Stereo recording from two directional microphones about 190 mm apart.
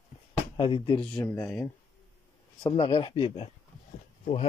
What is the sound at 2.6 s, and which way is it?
Speech, 25° left (ahead or behind).